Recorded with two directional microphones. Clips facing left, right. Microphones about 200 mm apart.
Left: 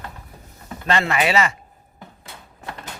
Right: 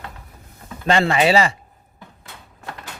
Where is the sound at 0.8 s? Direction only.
30° right (ahead or behind).